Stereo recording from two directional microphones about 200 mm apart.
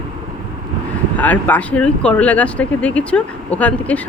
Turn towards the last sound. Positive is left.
turn(degrees=5)  # may be behind; listen again after turning